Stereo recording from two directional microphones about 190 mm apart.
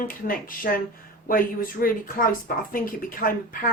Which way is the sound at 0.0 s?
45° left (ahead or behind).